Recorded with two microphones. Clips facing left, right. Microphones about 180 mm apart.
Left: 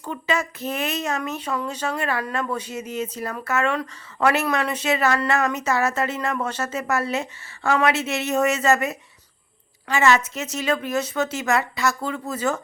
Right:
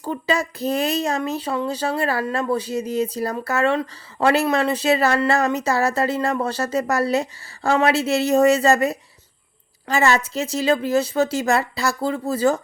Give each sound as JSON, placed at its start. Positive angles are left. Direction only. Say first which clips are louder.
{"t": 0.0, "sound": "speech", "louder": "right 3 dB", "side_deg": -35}